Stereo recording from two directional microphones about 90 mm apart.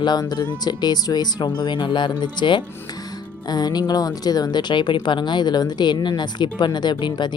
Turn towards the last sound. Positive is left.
turn(degrees=55)  # may be behind; listen again after turning